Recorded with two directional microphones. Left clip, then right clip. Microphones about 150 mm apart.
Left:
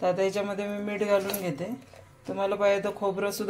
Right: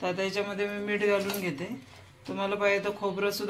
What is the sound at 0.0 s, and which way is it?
A man's voice, 70° left (ahead or behind).